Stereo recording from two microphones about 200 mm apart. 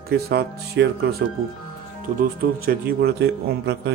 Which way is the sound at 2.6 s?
50° right (ahead or behind).